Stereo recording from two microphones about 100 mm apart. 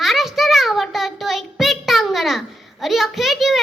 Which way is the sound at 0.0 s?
Centre (ahead or behind).